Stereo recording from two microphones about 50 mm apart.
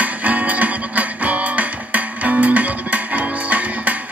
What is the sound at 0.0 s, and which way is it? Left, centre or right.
Music, right.